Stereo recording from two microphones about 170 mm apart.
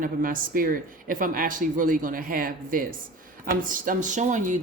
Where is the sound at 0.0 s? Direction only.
55° right (ahead or behind).